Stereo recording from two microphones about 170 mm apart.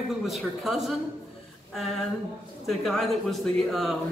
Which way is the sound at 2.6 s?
Centre (ahead or behind).